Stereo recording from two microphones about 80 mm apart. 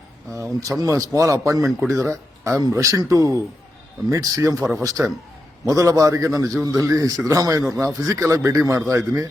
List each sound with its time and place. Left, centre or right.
0.3 s a man's voice: right